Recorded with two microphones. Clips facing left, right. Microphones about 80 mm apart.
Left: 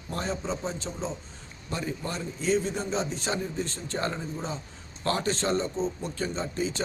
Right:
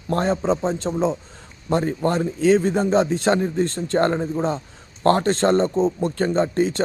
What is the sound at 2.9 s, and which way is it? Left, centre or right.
A man's voice, right.